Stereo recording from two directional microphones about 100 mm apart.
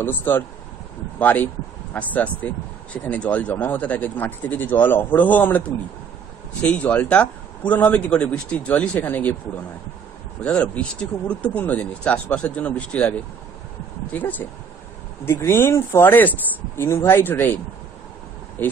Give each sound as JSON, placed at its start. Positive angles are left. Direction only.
{"t": 0.0, "sound": "speech", "side_deg": 20}
{"t": 6.6, "sound": "speech", "side_deg": 15}
{"t": 10.4, "sound": "speech", "side_deg": 10}
{"t": 14.1, "sound": "speech", "side_deg": 15}
{"t": 18.6, "sound": "speech", "side_deg": 20}